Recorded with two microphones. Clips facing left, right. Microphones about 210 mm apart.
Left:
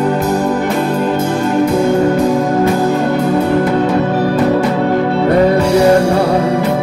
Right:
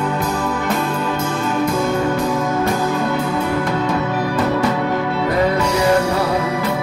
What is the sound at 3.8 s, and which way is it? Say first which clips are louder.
Music: left 6 dB; 40° left (ahead or behind).